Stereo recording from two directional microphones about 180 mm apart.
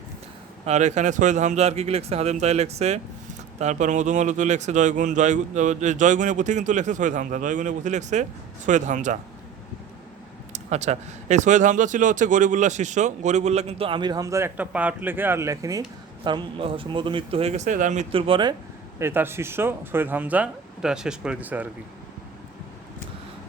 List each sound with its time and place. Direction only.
0.6 s speech: 40° right (ahead or behind)
10.5 s speech: 40° right (ahead or behind)
18.1 s speech: 30° right (ahead or behind)
18.9 s speech: 15° right (ahead or behind)